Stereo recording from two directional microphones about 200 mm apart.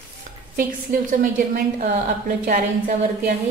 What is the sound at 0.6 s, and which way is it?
A woman's voice, 40° right (ahead or behind).